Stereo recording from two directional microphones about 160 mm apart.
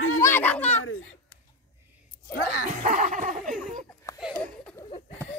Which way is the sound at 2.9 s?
55° right (ahead or behind).